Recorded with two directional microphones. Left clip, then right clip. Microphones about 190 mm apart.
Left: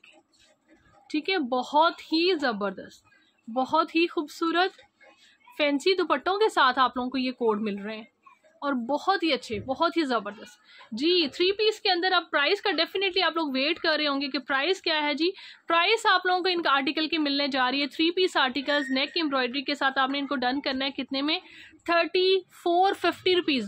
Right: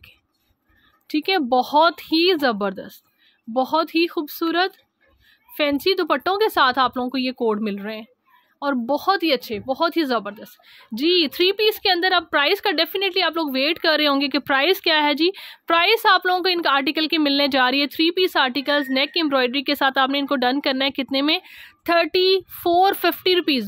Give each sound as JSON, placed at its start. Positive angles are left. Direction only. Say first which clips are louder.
{"t": 1.0, "sound": "speech", "louder": "right 7 dB", "side_deg": -50}